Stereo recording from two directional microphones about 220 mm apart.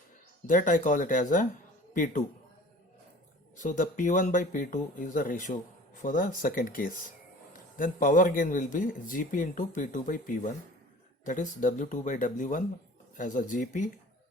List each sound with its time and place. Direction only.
0.4 s a man's voice: 35° left (ahead or behind)
3.6 s a man's voice: 35° left (ahead or behind)